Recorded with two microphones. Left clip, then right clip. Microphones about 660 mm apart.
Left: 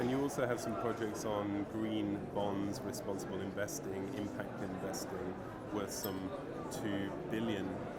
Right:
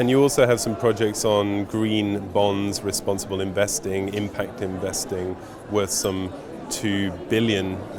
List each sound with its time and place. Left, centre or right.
0.1 s speech: right
5.7 s speech: right